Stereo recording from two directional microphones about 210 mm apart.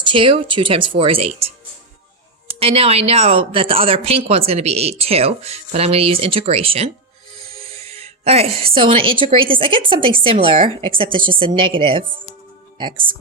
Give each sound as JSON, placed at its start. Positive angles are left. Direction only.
{"t": 0.0, "sound": "a woman's voice", "side_deg": -25}